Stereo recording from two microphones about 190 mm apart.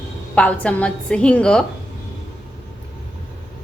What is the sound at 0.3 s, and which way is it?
Speech, 5° left (ahead or behind).